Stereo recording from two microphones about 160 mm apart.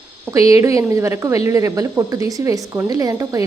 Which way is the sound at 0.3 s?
20° right (ahead or behind).